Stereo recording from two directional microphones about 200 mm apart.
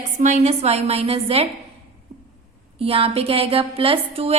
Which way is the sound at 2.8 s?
30° right (ahead or behind).